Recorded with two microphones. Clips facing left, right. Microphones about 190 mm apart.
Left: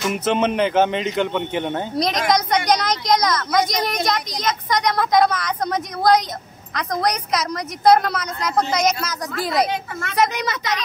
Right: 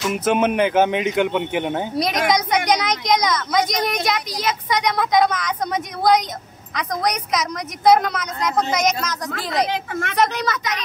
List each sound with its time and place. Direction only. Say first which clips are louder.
0.1 s a man's voice: right 2 dB; 10° right (ahead or behind)
10.1 s a woman's voice: left 1 dB; 10° left (ahead or behind)
10.4 s speech: even; 30° left (ahead or behind)